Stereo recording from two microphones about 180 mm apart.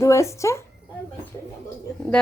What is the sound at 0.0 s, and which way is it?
Speech, 15° left (ahead or behind).